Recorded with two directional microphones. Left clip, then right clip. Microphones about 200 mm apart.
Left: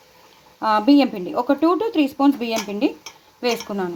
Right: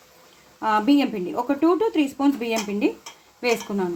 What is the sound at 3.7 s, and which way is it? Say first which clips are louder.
Speech: left 1 dB; 20° left (ahead or behind).